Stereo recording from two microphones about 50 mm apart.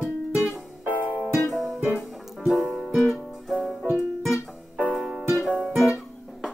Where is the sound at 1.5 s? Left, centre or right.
Centre.